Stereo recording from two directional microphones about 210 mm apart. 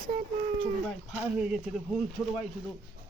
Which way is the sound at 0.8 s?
5° right (ahead or behind).